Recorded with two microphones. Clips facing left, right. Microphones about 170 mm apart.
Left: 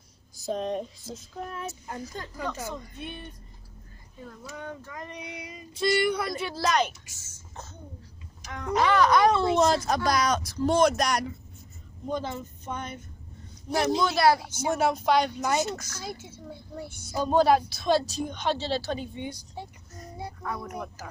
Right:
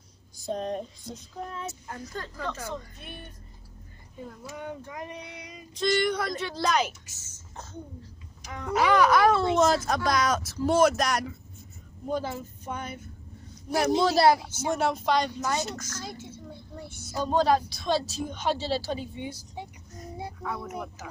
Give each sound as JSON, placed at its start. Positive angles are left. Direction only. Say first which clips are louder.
{"t": 0.5, "sound": "speech", "louder": "left 1 dB", "side_deg": 0}
{"t": 1.9, "sound": "speech", "louder": "left 1 dB", "side_deg": 20}
{"t": 4.6, "sound": "speech", "louder": "right 2 dB", "side_deg": -15}
{"t": 5.2, "sound": "speech", "louder": "left 3 dB", "side_deg": 10}
{"t": 8.5, "sound": "speech", "louder": "even", "side_deg": -5}
{"t": 13.9, "sound": "speech", "louder": "right 2 dB", "side_deg": -30}
{"t": 14.5, "sound": "speech", "louder": "left 1 dB", "side_deg": 5}
{"t": 20.4, "sound": "speech", "louder": "even", "side_deg": -5}